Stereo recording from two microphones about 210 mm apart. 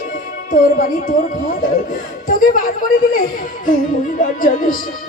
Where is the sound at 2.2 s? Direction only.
40° left (ahead or behind).